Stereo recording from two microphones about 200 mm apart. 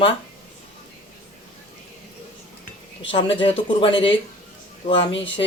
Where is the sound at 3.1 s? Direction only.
25° left (ahead or behind).